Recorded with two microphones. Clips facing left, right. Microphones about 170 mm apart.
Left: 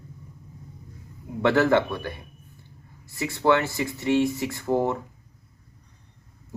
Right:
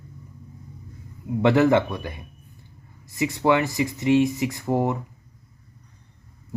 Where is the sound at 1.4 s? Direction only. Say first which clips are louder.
Right 2 dB; 20° right (ahead or behind).